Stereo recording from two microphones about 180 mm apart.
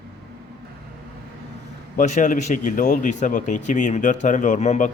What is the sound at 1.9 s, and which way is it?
Speech, 45° left (ahead or behind).